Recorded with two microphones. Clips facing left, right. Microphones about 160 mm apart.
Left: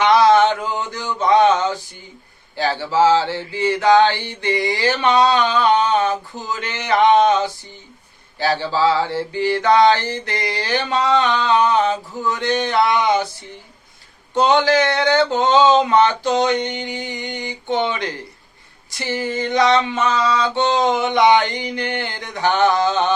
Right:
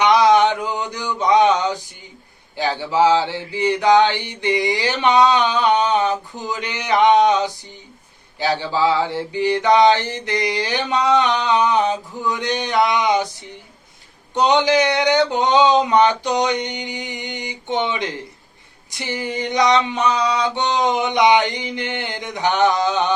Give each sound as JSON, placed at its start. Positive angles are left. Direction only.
{"t": 0.0, "sound": "a sound", "side_deg": -15}
{"t": 2.6, "sound": "mantra", "side_deg": -15}
{"t": 14.3, "sound": "mantra", "side_deg": -20}